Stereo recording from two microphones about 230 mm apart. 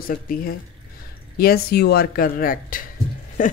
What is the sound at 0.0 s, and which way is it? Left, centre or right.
Speech, left.